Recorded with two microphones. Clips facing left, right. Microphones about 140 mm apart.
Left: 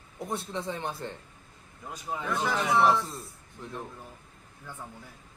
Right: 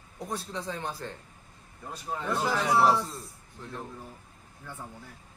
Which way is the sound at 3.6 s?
15° left (ahead or behind).